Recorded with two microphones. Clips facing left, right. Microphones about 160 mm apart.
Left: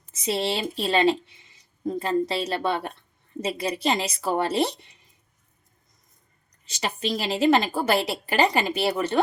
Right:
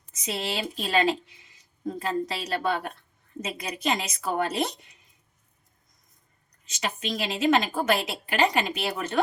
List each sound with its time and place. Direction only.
0.1 s a woman's voice: 30° left (ahead or behind)
6.7 s a woman's voice: 35° left (ahead or behind)